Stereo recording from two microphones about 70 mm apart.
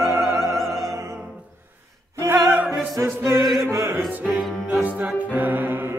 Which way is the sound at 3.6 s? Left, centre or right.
Right.